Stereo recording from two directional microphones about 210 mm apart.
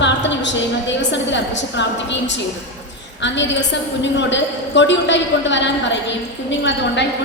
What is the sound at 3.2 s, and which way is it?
A man's voice, 60° left (ahead or behind).